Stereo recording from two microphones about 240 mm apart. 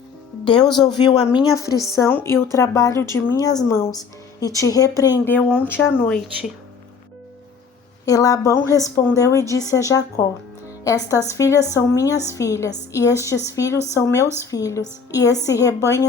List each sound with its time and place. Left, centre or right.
0.8 s a woman's voice: centre
8.0 s a woman's voice: centre